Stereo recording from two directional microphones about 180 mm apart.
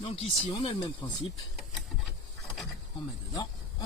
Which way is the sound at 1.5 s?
Centre (ahead or behind).